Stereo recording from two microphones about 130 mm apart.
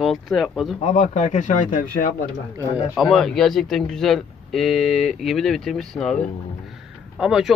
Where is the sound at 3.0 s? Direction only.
Centre (ahead or behind).